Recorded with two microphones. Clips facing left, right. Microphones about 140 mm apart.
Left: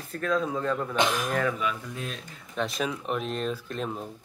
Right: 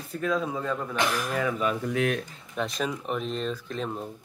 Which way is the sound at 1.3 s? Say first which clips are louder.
Left 1 dB; 10° right (ahead or behind).